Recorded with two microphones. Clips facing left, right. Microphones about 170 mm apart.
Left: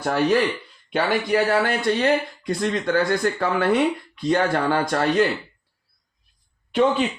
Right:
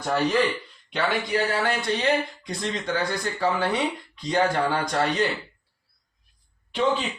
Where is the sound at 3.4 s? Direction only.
60° left (ahead or behind).